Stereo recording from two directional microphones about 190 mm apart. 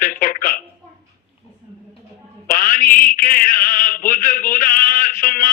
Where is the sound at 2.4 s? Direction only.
45° left (ahead or behind).